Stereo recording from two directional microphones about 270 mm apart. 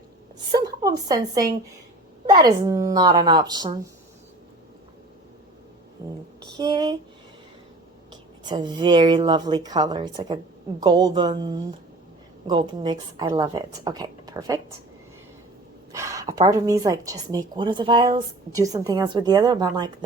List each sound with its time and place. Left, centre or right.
0.5 s a woman's voice: centre
6.4 s speech: centre
8.4 s a woman's voice: centre
15.9 s a woman's voice: centre